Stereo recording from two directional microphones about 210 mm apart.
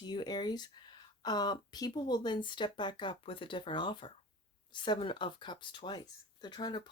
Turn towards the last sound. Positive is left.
turn(degrees=20)  # may be behind; listen again after turning